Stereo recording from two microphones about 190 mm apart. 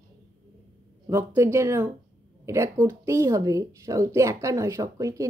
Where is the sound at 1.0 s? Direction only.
15° right (ahead or behind).